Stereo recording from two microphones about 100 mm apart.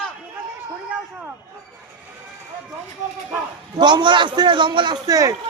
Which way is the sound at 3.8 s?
50° right (ahead or behind).